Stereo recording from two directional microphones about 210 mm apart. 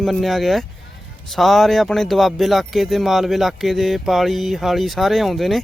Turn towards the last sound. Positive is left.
turn(degrees=0)  # may be behind; listen again after turning